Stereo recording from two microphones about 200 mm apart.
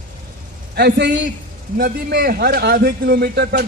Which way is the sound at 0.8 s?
55° right (ahead or behind).